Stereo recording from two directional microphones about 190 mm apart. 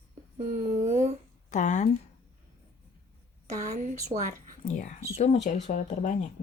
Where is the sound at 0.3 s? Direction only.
40° right (ahead or behind).